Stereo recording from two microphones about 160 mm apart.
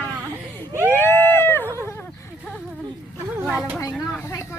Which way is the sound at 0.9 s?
15° left (ahead or behind).